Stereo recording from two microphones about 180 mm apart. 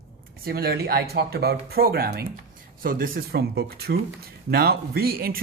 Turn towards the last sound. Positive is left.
turn(degrees=-55)  # may be behind; listen again after turning